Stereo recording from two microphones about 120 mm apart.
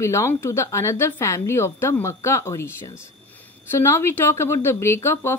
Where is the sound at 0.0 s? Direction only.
25° left (ahead or behind).